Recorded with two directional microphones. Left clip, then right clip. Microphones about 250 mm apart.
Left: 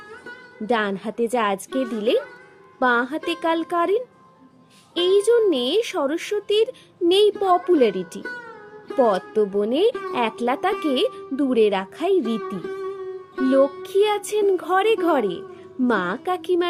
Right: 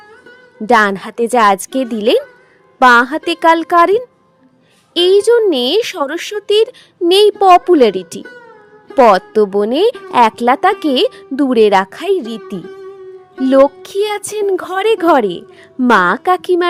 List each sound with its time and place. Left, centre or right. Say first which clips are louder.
0.7 s a woman's voice: right 12 dB; right
8.2 s music: left 1 dB; centre
9.0 s a woman's voice: right 10 dB; right
12.6 s music: left 1 dB; centre
13.5 s a woman's voice: right 9 dB; right